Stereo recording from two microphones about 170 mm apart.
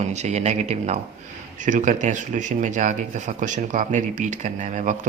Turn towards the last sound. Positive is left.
turn(degrees=-45)  # may be behind; listen again after turning